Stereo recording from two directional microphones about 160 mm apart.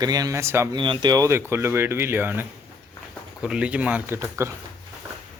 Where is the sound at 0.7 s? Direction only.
30° right (ahead or behind).